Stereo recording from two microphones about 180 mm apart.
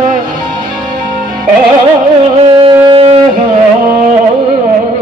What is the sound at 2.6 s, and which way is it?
Music, 30° right (ahead or behind).